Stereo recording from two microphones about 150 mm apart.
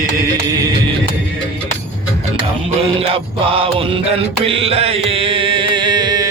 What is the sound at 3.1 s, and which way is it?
Music, 40° right (ahead or behind).